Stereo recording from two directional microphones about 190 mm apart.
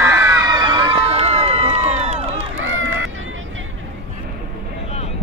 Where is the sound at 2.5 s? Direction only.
90° right.